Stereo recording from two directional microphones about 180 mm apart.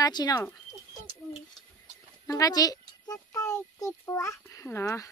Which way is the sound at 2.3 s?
20° left (ahead or behind).